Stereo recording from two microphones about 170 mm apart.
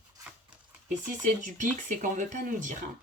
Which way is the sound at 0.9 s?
50° right (ahead or behind).